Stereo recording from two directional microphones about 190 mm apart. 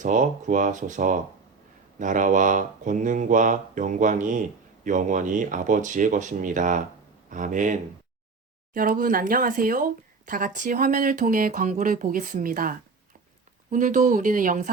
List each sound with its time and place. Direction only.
0.0 s speech: 40° right (ahead or behind)